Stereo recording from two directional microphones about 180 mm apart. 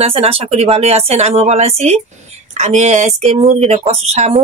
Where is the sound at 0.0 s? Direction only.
30° right (ahead or behind).